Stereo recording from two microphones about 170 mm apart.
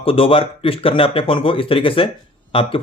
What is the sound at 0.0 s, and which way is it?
Speech, 35° left (ahead or behind).